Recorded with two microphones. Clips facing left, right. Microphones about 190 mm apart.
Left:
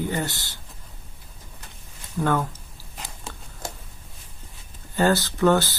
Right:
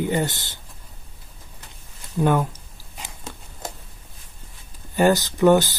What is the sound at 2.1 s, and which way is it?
Speech, 15° right (ahead or behind).